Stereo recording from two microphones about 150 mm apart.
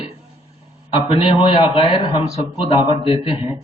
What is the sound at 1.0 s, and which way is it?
A man's voice, 35° left (ahead or behind).